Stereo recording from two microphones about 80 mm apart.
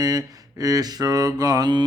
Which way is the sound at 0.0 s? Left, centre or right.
Right.